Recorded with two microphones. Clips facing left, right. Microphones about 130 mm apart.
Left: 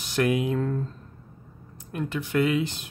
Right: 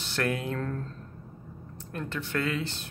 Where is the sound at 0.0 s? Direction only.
15° left (ahead or behind).